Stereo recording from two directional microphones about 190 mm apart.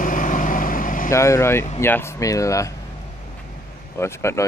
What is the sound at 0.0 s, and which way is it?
Vehicle, 45° left (ahead or behind).